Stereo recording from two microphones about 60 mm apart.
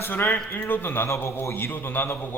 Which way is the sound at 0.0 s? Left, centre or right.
Left.